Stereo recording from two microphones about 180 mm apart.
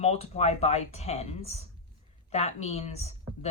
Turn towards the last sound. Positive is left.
turn(degrees=35)  # may be behind; listen again after turning